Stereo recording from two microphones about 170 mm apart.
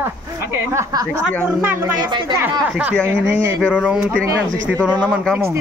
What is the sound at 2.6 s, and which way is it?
Speech, 5° right (ahead or behind).